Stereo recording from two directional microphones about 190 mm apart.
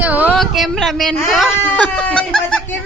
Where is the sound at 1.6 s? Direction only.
10° left (ahead or behind).